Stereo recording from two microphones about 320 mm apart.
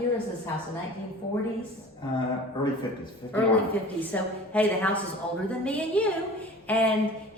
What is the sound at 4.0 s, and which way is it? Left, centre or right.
A woman's voice, centre.